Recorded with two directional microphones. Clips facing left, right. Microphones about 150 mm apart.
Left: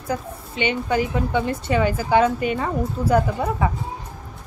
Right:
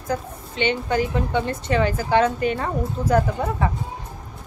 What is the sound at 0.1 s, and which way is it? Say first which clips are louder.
A woman's voice: even; 10° left (ahead or behind).